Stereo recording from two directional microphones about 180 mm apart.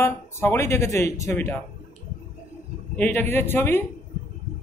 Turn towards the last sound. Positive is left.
turn(degrees=10)  # may be behind; listen again after turning